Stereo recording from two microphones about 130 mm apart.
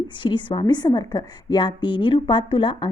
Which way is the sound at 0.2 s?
40° left (ahead or behind).